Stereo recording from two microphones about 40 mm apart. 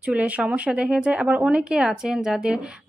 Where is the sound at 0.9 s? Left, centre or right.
Right.